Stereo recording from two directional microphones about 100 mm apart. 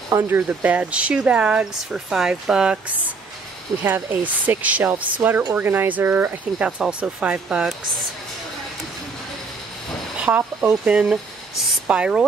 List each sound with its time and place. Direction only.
0.1 s speech: 30° right (ahead or behind)
0.4 s speech: 15° right (ahead or behind)
3.8 s speech: 20° right (ahead or behind)
10.2 s speech: 15° right (ahead or behind)